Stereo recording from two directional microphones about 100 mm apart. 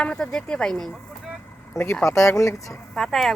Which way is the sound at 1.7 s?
25° left (ahead or behind).